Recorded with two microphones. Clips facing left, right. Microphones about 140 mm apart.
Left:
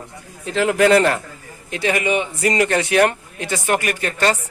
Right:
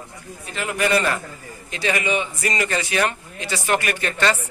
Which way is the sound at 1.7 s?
60° left (ahead or behind).